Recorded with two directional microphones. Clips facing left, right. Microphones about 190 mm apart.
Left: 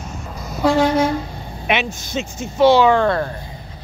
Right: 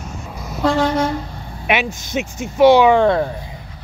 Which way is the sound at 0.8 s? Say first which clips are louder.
Left 3 dB; 5° left (ahead or behind).